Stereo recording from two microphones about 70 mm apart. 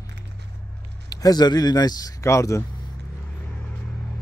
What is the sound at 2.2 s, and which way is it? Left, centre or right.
Speech, left.